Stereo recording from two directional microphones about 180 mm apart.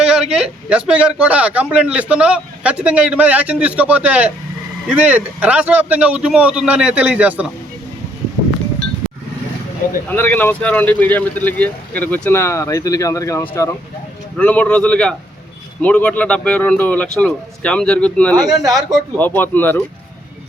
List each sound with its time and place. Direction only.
0.0 s a man's voice: 5° right (ahead or behind)
10.1 s speech: 10° left (ahead or behind)
18.3 s speech: 20° right (ahead or behind)
18.7 s speech: centre (ahead or behind)
19.2 s speech: 10° left (ahead or behind)